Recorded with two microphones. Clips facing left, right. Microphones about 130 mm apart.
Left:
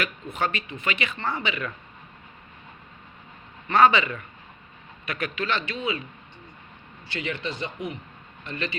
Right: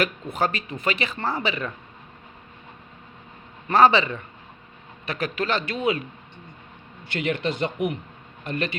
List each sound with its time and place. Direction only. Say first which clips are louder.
0.3 s speech: right 3 dB; 40° right (ahead or behind)
3.7 s speech: right 2 dB; 35° right (ahead or behind)
7.1 s a man's voice: right 6 dB; 55° right (ahead or behind)